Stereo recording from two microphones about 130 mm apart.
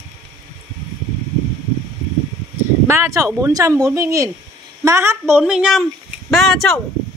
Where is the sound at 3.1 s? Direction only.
20° right (ahead or behind).